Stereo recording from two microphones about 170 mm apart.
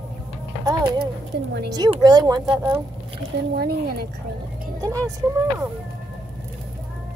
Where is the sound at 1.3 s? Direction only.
85° right.